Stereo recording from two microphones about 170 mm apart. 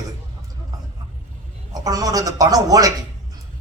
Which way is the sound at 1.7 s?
20° right (ahead or behind).